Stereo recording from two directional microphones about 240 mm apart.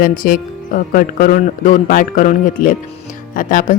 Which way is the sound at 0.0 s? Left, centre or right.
Left.